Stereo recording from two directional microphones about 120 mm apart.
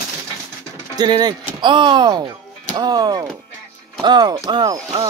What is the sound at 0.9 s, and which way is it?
Mechanisms, 35° right (ahead or behind).